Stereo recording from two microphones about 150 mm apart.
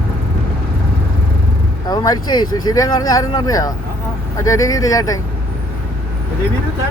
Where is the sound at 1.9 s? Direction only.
30° left (ahead or behind).